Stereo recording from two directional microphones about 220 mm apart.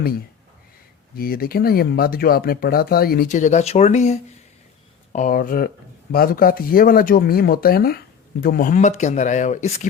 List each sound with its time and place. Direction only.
1.1 s speech: 40° left (ahead or behind)